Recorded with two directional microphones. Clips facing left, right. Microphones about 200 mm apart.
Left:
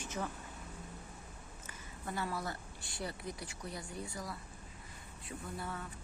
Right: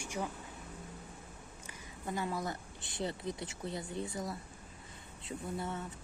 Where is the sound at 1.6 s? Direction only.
15° right (ahead or behind).